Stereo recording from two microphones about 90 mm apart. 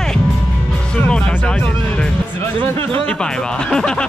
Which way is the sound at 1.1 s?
10° left (ahead or behind).